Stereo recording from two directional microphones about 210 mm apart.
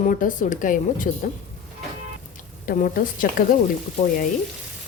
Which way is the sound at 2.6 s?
40° left (ahead or behind).